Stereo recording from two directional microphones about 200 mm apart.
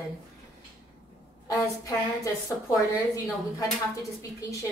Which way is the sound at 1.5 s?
15° left (ahead or behind).